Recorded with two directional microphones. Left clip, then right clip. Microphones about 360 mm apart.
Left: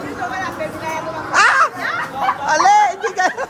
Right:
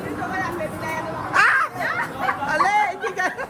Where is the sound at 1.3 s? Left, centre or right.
Centre.